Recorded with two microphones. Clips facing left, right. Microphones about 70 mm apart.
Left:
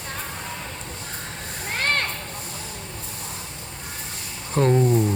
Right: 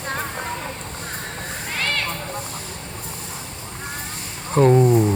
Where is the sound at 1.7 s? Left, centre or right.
Left.